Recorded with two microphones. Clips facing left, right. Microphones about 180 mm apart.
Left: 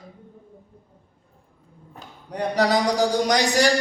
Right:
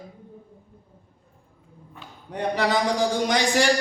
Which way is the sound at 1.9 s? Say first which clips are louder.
Left 1 dB; 40° left (ahead or behind).